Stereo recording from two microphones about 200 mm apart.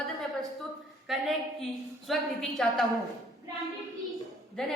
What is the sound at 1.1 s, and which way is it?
A woman's voice, centre (ahead or behind).